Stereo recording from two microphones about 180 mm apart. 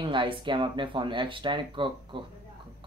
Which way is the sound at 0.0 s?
25° right (ahead or behind).